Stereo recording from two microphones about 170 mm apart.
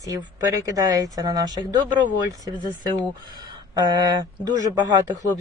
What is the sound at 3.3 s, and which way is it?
Speech, 25° right (ahead or behind).